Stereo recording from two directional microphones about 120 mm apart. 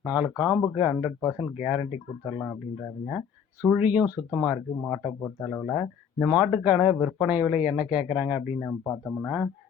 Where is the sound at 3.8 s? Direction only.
10° right (ahead or behind).